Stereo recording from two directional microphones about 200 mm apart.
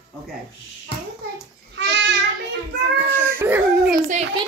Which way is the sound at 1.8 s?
60° right (ahead or behind).